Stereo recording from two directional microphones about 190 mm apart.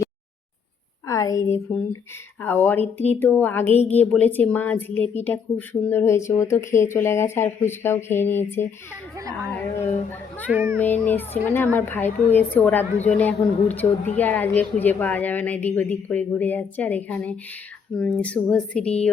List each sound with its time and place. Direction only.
1.0 s speech: 15° left (ahead or behind)
9.1 s a woman's voice: 15° right (ahead or behind)
9.5 s a sound: 10° left (ahead or behind)
10.5 s a woman's voice: 10° right (ahead or behind)
10.8 s speech: 10° left (ahead or behind)